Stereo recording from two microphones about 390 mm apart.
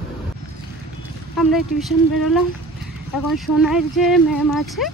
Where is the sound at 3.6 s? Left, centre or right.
Centre.